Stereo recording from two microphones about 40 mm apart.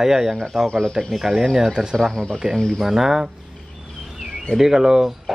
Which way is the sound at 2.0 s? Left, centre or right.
Centre.